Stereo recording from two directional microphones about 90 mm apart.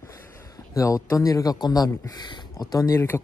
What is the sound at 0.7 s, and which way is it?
Speech, 40° left (ahead or behind).